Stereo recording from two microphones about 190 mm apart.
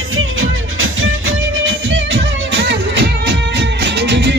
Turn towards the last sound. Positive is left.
turn(degrees=-65)  # may be behind; listen again after turning